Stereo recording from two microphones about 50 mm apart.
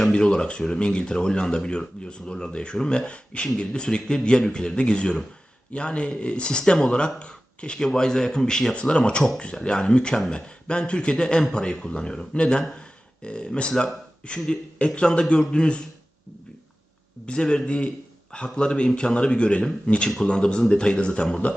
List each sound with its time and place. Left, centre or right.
0.1 s speech: centre
17.2 s speech: centre